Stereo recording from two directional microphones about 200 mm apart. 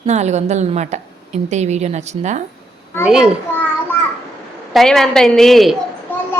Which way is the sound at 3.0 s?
5° right (ahead or behind).